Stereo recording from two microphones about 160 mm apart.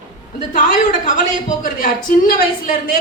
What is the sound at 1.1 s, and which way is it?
A woman's voice, 55° left (ahead or behind).